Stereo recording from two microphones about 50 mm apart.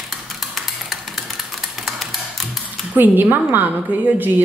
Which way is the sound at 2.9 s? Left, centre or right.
Right.